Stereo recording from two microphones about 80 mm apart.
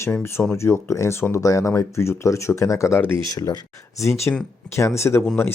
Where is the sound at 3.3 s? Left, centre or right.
Left.